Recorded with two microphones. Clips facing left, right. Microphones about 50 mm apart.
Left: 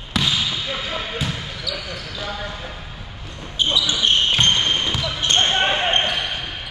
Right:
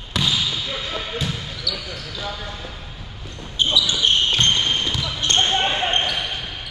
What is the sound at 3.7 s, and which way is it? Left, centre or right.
Basketball bounce, left.